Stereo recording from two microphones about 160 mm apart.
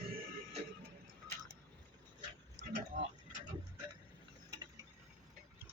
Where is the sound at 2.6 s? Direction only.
90° right.